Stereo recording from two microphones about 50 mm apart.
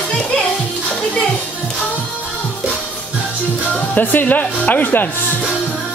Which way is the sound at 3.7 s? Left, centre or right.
Left.